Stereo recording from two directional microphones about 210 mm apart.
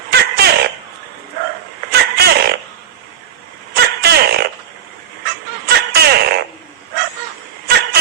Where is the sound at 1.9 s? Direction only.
50° right (ahead or behind).